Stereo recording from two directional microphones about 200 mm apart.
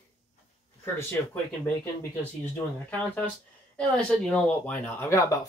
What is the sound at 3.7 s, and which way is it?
Speech, 5° left (ahead or behind).